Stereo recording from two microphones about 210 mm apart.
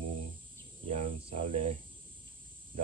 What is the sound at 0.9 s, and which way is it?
Speech, 30° right (ahead or behind).